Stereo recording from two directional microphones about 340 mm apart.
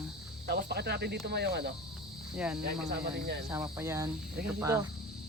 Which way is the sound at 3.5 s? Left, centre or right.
Centre.